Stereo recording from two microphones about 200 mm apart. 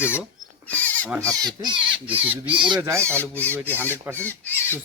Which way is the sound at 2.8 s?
15° right (ahead or behind).